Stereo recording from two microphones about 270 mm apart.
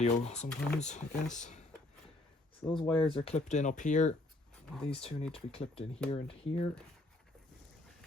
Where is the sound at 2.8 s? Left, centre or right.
Centre.